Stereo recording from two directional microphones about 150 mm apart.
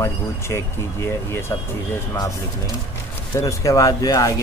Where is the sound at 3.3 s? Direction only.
20° left (ahead or behind).